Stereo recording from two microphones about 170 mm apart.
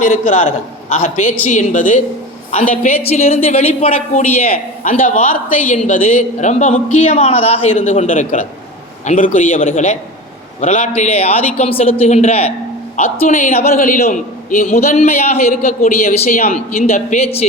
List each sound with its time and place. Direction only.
0.0 s a man's voice: 50° left (ahead or behind)
4.5 s a man's voice: 50° left (ahead or behind)
13.0 s a man's voice: 50° left (ahead or behind)
14.9 s a man's voice: 40° left (ahead or behind)